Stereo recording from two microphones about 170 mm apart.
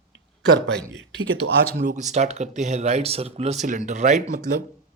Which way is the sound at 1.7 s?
50° right (ahead or behind).